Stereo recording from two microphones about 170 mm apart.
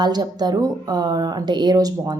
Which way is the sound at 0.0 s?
25° right (ahead or behind).